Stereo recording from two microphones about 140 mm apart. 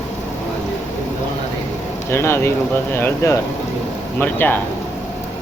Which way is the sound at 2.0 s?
20° left (ahead or behind).